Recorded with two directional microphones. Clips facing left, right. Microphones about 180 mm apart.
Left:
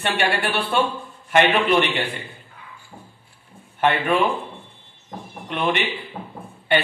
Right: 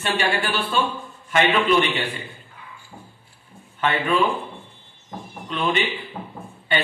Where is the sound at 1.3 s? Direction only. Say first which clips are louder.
Left 1 dB; 60° left (ahead or behind).